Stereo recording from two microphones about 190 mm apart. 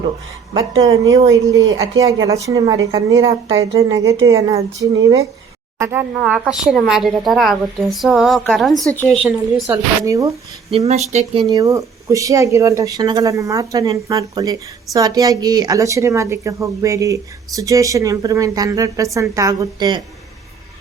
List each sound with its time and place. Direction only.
0.8 s a woman's voice: 20° right (ahead or behind)
3.7 s speech: 30° right (ahead or behind)
3.9 s a woman's voice: 15° right (ahead or behind)
5.8 s speech: 10° right (ahead or behind)
9.6 s a woman's voice: 15° right (ahead or behind)
10.7 s speech: 35° right (ahead or behind)
11.4 s a woman's voice: 15° right (ahead or behind)